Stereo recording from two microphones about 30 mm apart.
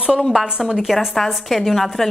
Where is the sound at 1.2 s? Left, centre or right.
Centre.